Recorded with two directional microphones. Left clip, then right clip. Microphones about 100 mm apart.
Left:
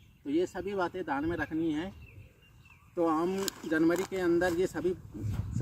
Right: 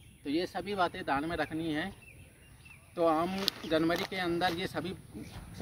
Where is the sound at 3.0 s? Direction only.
30° right (ahead or behind).